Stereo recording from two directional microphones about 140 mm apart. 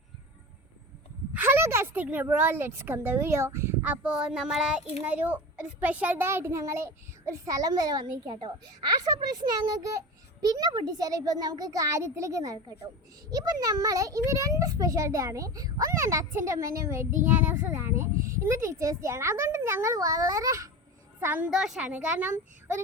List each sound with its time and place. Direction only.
1.4 s a woman's voice: 15° right (ahead or behind)
21.5 s a woman's voice: 5° right (ahead or behind)